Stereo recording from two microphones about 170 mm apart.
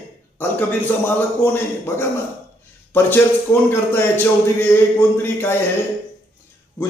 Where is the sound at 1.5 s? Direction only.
10° left (ahead or behind).